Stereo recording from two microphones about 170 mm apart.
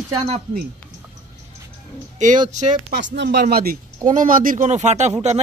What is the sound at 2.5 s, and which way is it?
Speech, 45° right (ahead or behind).